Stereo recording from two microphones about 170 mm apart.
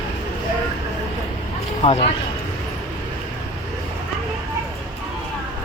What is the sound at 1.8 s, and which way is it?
Speech, 35° left (ahead or behind).